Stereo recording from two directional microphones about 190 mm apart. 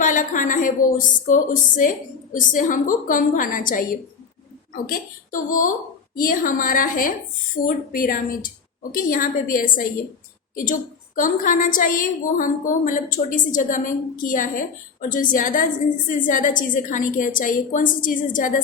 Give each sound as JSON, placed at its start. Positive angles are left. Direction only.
{"t": 0.0, "sound": "a woman's voice", "side_deg": 40}